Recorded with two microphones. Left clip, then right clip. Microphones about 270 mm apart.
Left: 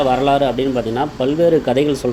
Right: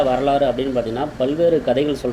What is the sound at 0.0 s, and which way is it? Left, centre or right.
Speech, left.